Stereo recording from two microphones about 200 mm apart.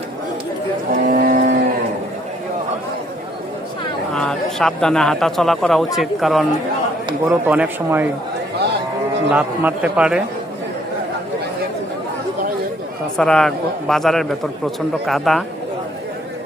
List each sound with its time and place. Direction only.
1.0 s livestock: 45° right (ahead or behind)
4.1 s speech: 5° left (ahead or behind)
7.1 s speech: 10° right (ahead or behind)
9.3 s a man's voice: 5° right (ahead or behind)
13.1 s a man's voice: 5° left (ahead or behind)